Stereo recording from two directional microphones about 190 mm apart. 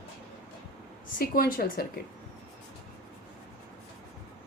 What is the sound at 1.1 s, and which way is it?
Speech, 50° left (ahead or behind).